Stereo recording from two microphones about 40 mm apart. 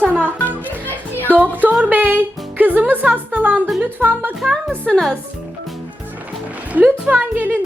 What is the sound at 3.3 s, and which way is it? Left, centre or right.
Music, right.